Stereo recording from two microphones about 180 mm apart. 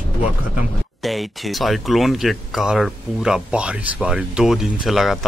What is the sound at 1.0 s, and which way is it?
Speech, centre (ahead or behind).